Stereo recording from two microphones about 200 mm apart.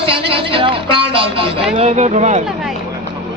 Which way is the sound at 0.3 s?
25° right (ahead or behind).